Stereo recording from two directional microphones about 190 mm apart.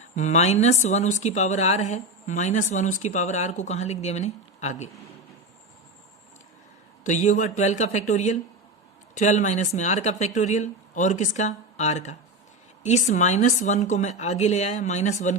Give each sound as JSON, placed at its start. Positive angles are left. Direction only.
{"t": 0.2, "sound": "speech", "side_deg": 35}
{"t": 7.0, "sound": "speech", "side_deg": 40}